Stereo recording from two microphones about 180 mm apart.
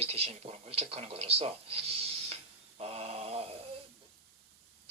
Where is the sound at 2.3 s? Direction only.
35° right (ahead or behind).